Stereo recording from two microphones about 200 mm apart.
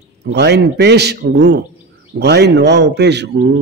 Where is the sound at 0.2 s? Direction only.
55° right (ahead or behind).